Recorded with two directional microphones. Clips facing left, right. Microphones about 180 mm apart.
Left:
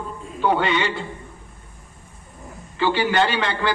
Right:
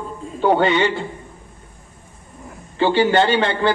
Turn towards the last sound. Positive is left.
turn(degrees=-25)  # may be behind; listen again after turning